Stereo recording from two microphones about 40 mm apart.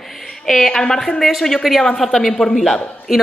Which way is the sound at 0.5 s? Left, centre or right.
Centre.